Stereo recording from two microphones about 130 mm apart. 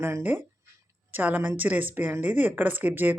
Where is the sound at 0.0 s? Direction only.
15° right (ahead or behind).